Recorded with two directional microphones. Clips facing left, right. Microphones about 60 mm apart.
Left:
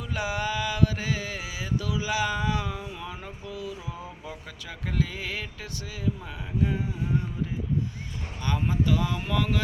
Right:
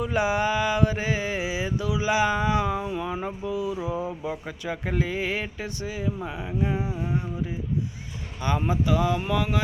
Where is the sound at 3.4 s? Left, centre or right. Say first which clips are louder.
Right 7 dB; right.